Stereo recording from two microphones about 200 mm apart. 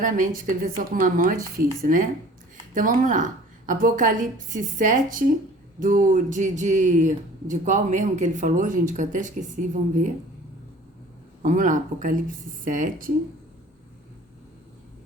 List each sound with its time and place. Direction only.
0.0 s a woman's voice: 40° right (ahead or behind)
11.4 s a woman's voice: 40° right (ahead or behind)